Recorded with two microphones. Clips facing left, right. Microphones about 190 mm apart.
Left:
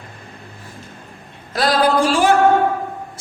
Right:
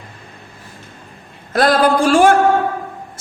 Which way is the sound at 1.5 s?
50° right (ahead or behind).